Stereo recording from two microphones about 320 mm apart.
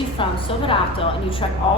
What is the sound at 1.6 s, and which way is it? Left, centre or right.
Speech, centre.